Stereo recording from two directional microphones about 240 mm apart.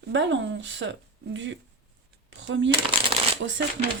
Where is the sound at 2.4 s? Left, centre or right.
Right.